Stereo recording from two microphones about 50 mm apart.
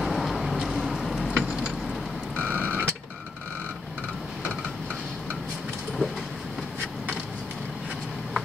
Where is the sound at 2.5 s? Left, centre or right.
Right.